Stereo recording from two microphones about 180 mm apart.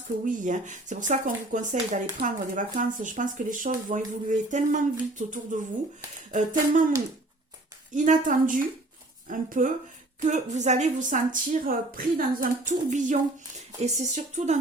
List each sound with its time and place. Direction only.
0.3 s speech: 45° right (ahead or behind)
7.9 s speech: 45° right (ahead or behind)